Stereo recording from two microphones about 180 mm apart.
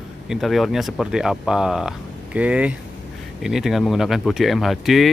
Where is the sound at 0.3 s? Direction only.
Centre (ahead or behind).